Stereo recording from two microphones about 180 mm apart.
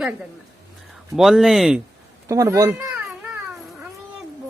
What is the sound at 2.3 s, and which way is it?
Speech, 20° right (ahead or behind).